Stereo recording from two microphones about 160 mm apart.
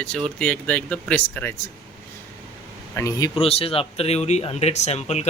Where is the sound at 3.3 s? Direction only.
40° left (ahead or behind).